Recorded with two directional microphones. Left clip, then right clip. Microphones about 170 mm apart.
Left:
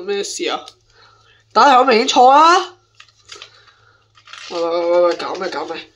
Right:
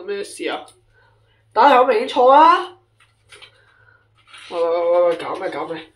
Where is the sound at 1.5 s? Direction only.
40° left (ahead or behind).